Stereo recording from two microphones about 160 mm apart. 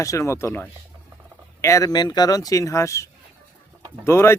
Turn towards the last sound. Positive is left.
turn(degrees=15)  # may be behind; listen again after turning